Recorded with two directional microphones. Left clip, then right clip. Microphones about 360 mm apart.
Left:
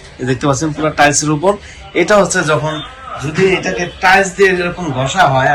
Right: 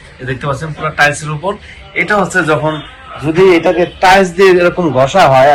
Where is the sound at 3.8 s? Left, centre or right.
Centre.